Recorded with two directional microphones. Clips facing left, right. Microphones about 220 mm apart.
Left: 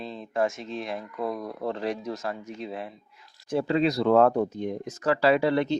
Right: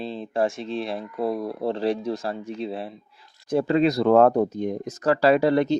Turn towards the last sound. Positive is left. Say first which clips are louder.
# right 4 dB
turn(degrees=-40)  # may be behind; listen again after turning